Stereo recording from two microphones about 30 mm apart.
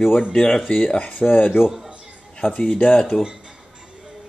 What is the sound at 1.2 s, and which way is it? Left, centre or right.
Speech, left.